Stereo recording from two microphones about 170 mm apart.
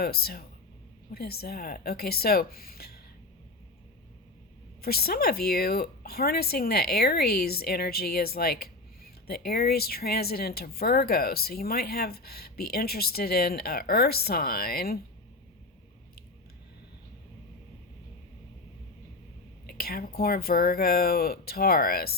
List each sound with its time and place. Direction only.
0.0 s speech: 65° left (ahead or behind)
4.8 s speech: 65° left (ahead or behind)
19.6 s speech: 65° left (ahead or behind)